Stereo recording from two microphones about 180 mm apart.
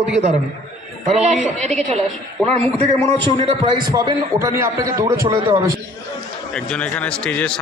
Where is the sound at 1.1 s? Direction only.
40° right (ahead or behind).